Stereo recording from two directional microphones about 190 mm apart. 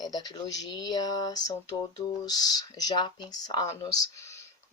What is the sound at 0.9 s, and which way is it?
Speech, 20° left (ahead or behind).